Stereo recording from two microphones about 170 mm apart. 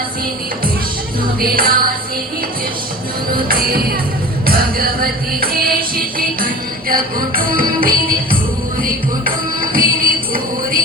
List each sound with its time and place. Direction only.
1.4 s music: 60° right (ahead or behind)
3.3 s music: 60° right (ahead or behind)